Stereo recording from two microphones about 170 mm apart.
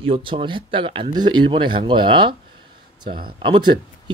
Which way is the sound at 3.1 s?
60° right (ahead or behind).